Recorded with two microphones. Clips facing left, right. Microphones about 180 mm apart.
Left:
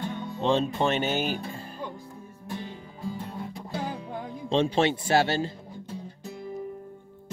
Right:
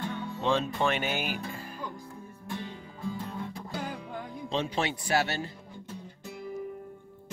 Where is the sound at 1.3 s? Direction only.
30° left (ahead or behind).